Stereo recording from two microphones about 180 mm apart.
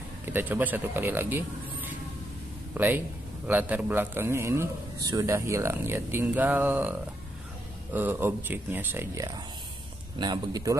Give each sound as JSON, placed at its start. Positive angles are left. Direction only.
{"t": 0.2, "sound": "a man's voice", "side_deg": -10}